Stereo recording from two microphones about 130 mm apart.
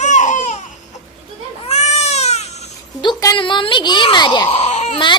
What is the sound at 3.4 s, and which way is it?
Speech, 40° left (ahead or behind).